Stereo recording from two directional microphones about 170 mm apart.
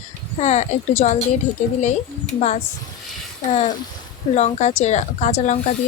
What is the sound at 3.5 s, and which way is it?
A woman's voice, 45° left (ahead or behind).